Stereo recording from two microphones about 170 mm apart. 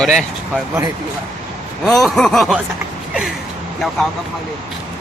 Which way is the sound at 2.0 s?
5° left (ahead or behind).